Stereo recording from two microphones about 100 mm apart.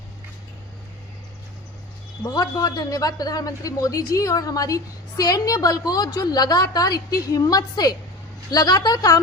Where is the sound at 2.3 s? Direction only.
40° left (ahead or behind).